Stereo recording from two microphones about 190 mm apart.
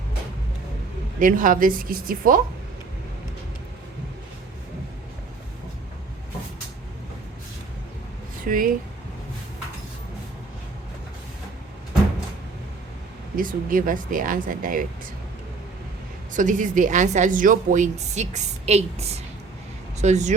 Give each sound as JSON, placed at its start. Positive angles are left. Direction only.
{"t": 1.2, "sound": "speech", "side_deg": -45}
{"t": 8.4, "sound": "speech", "side_deg": -45}
{"t": 13.3, "sound": "speech", "side_deg": -45}
{"t": 16.3, "sound": "a woman's voice", "side_deg": -40}